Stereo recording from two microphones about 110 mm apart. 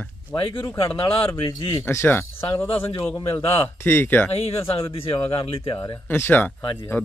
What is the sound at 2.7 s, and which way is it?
Speech, 55° left (ahead or behind).